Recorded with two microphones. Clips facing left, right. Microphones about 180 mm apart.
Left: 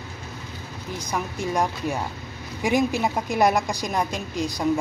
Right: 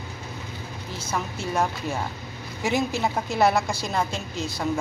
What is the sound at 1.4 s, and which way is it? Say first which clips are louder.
Speech: left 3 dB; 15° left (ahead or behind).